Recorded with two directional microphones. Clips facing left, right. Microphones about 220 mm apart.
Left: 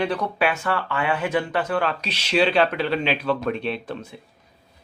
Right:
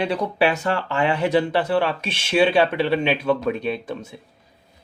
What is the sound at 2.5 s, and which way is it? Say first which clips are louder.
Speech: right 2 dB; 20° right (ahead or behind).